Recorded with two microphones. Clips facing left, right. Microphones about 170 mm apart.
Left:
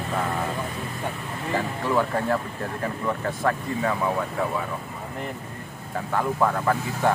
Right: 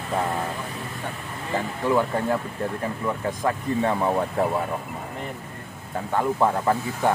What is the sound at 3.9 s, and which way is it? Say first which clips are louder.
Speech: right 2 dB; 35° right (ahead or behind).